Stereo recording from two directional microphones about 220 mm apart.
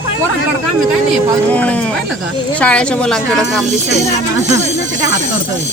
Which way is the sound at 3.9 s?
30° right (ahead or behind).